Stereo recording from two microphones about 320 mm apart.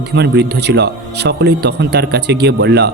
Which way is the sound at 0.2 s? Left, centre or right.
Right.